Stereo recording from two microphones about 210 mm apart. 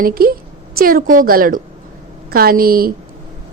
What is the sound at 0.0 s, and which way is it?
A woman's voice, 45° right (ahead or behind).